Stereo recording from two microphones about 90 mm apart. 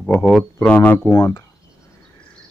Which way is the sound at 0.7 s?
20° left (ahead or behind).